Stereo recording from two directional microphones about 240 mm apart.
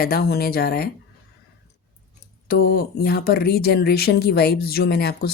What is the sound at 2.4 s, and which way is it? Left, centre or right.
Speech, left.